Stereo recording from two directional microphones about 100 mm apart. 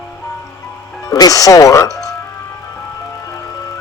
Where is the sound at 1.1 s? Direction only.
35° left (ahead or behind).